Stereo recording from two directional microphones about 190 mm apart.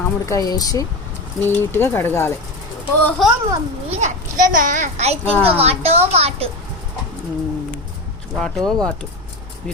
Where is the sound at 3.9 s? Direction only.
40° right (ahead or behind).